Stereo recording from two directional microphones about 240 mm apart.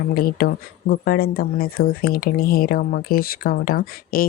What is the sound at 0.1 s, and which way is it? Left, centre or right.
Speech, left.